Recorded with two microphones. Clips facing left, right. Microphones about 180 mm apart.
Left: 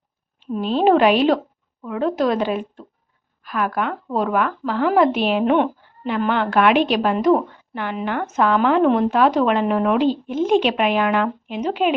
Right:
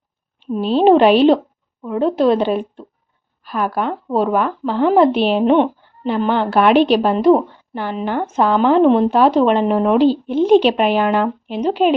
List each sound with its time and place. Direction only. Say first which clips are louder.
0.5 s speech: right 4 dB; 30° right (ahead or behind)